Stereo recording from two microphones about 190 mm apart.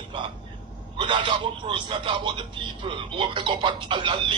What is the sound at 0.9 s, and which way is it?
A man's voice, 25° right (ahead or behind).